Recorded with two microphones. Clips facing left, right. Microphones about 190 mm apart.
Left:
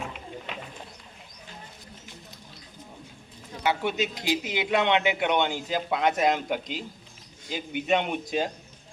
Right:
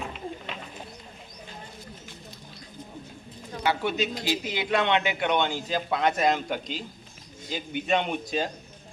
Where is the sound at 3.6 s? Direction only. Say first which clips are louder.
Even; 15° left (ahead or behind).